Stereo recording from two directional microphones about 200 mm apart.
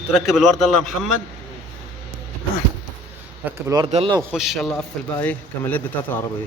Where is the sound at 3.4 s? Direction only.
15° right (ahead or behind).